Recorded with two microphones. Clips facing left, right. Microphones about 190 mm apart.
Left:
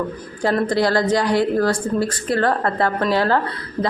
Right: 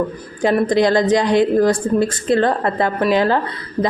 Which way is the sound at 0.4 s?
20° right (ahead or behind).